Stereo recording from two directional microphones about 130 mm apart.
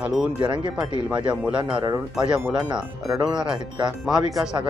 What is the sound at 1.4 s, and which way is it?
Speech, 5° right (ahead or behind).